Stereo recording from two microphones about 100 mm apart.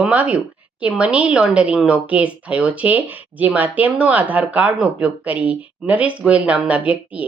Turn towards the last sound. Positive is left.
turn(degrees=-15)  # may be behind; listen again after turning